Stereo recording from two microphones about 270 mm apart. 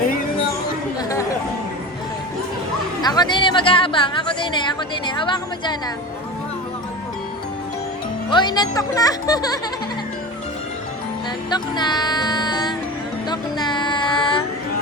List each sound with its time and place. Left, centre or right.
3.0 s a woman's voice: centre
8.3 s speech: centre
11.5 s music: centre
13.3 s a sound: centre